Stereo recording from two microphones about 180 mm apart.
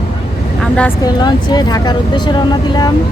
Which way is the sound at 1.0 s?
25° left (ahead or behind).